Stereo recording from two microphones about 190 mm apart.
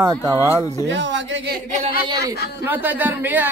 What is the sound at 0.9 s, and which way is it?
Speech, 75° right (ahead or behind).